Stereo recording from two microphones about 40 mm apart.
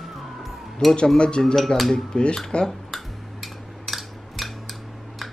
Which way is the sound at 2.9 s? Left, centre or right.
Centre.